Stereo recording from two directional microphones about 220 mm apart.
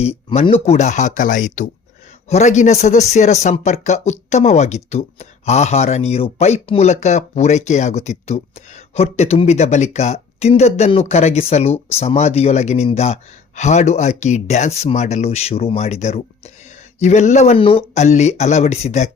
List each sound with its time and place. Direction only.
0.0 s speech: 30° left (ahead or behind)